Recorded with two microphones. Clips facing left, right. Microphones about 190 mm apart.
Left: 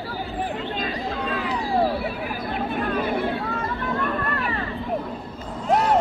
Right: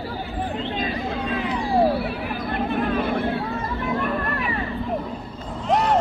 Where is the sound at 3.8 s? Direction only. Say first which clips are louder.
Right 2 dB; 10° right (ahead or behind).